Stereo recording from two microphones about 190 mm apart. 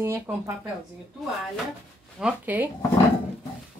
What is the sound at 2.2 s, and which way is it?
Speech, 10° right (ahead or behind).